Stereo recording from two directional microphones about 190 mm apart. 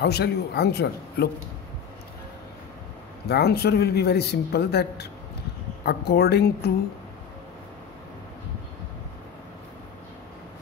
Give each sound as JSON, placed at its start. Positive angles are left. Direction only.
{"t": 0.0, "sound": "speech", "side_deg": 60}
{"t": 3.3, "sound": "speech", "side_deg": 60}